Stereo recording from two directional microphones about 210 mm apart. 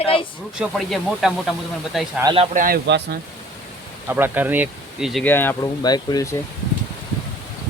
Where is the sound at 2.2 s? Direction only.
20° right (ahead or behind).